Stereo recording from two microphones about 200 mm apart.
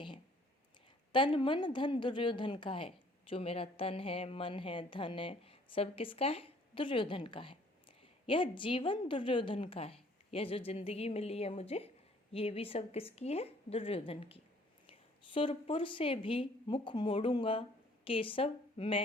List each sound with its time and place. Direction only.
1.1 s a woman's voice: 25° left (ahead or behind)